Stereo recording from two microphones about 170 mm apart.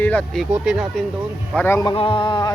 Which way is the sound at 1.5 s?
15° left (ahead or behind).